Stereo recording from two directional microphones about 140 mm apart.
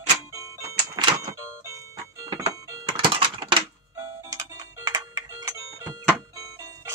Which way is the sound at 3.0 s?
35° right (ahead or behind).